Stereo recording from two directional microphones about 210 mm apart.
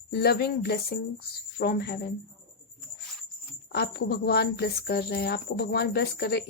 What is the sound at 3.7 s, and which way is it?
Speech, 50° left (ahead or behind).